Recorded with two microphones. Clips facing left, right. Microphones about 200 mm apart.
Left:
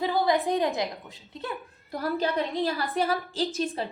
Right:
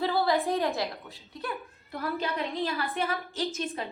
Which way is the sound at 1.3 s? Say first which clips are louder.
Left 1 dB; 30° left (ahead or behind).